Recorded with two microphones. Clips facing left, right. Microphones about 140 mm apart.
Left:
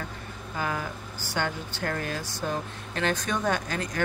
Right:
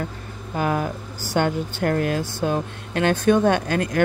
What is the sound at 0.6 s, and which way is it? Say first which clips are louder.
Speech: right 8 dB; 50° right (ahead or behind).